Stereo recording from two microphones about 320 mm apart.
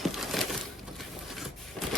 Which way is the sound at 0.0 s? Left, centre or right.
Centre.